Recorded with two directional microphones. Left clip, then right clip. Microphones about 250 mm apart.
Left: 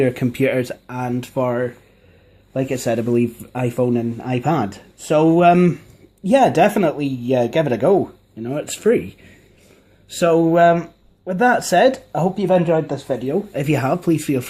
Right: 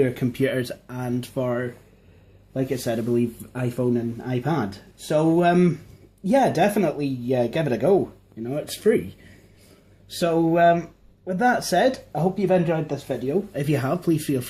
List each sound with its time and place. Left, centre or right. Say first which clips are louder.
0.0 s a man's voice: left 4 dB; left
10.2 s a man's voice: left 6 dB; left